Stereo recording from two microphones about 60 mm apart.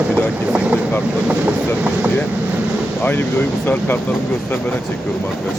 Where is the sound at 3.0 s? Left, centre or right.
Left.